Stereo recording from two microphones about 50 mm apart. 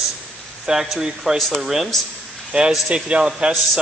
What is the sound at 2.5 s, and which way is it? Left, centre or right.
Speech, right.